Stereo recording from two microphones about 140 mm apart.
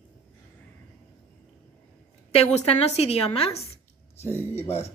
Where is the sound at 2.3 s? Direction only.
50° left (ahead or behind).